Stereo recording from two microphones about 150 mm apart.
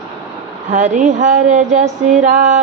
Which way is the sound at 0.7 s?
55° right (ahead or behind).